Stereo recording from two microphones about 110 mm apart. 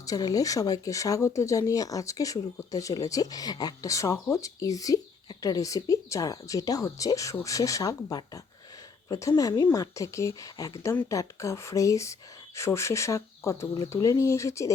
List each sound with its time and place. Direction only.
0.0 s speech: 35° left (ahead or behind)